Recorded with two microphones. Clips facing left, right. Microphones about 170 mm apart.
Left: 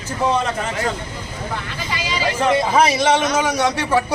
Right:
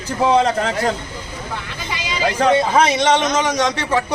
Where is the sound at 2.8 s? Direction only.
5° left (ahead or behind).